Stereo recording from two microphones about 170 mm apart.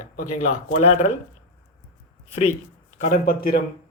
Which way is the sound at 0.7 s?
45° left (ahead or behind).